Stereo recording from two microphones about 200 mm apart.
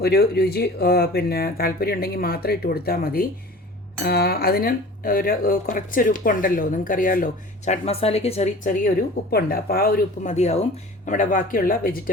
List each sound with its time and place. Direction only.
0.0 s speech: 55° left (ahead or behind)